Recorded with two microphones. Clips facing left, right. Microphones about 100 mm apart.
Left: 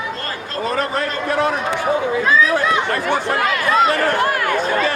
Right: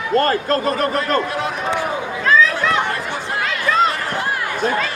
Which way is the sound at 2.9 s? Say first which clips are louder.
Left 5 dB; 60° left (ahead or behind).